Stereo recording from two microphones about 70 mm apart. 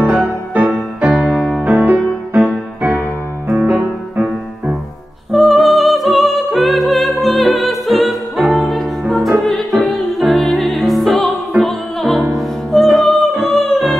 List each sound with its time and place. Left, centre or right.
0.1 s music: right
0.7 s music: centre
1.3 s music: centre
1.6 s music: right
5.3 s music: centre